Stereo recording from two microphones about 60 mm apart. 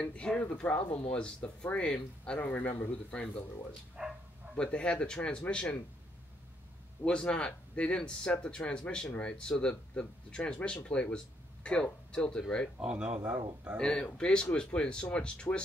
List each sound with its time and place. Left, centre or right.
0.0 s speech: centre
2.3 s speech: left
4.0 s bow-wow: centre
4.6 s speech: centre
7.1 s speech: centre
12.8 s speech: centre
13.7 s speech: centre